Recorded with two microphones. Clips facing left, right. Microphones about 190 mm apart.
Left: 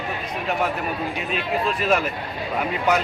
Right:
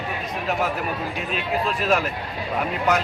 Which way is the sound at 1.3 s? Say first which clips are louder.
Left 1 dB; centre (ahead or behind).